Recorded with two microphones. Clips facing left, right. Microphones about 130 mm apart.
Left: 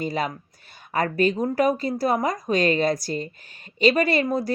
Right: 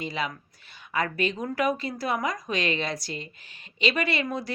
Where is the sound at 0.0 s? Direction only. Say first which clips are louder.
Left 5 dB; 45° left (ahead or behind).